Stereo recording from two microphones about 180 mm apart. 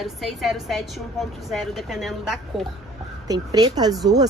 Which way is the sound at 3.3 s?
20° right (ahead or behind).